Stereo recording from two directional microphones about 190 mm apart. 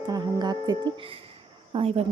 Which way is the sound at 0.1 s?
20° right (ahead or behind).